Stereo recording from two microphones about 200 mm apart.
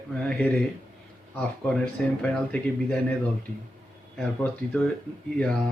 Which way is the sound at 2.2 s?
5° left (ahead or behind).